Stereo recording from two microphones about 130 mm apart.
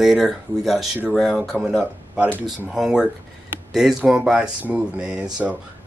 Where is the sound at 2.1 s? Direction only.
15° right (ahead or behind).